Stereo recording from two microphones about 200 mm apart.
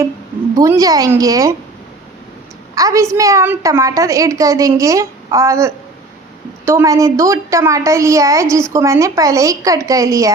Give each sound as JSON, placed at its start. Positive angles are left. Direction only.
{"t": 0.5, "sound": "a woman's voice", "side_deg": -15}
{"t": 2.7, "sound": "a woman's voice", "side_deg": -15}